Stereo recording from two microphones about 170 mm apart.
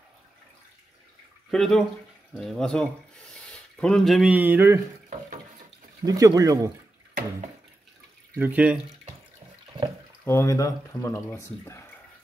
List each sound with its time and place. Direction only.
1.5 s speech: centre (ahead or behind); by 4.8 s 15° right (ahead or behind)
6.0 s speech: 20° right (ahead or behind)
8.4 s speech: 10° right (ahead or behind)
10.2 s speech: 15° left (ahead or behind)